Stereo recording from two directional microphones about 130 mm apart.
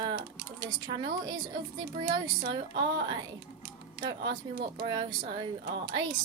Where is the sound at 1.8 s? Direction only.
35° right (ahead or behind).